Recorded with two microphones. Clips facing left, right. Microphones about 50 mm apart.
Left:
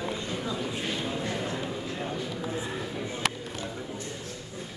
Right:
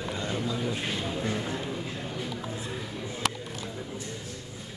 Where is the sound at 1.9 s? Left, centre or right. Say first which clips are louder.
Left 2 dB; centre.